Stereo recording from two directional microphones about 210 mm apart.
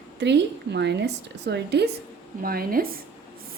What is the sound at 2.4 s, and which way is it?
Speech, 45° right (ahead or behind).